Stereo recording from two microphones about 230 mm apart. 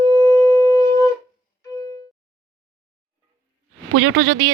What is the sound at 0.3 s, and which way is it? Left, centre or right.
Shofar, centre.